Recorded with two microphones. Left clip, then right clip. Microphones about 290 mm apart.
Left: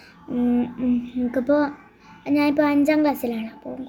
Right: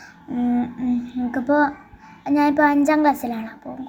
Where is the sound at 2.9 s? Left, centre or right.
Right.